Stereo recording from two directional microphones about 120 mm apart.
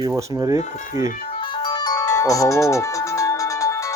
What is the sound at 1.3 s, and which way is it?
Music, 45° left (ahead or behind).